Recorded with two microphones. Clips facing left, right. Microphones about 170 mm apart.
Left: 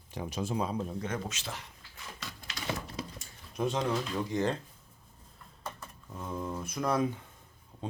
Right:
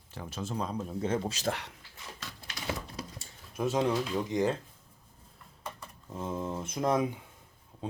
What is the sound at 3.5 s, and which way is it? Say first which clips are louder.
Speech: right 2 dB; 5° right (ahead or behind).